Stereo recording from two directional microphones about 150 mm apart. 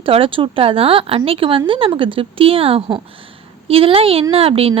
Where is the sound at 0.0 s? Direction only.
35° right (ahead or behind).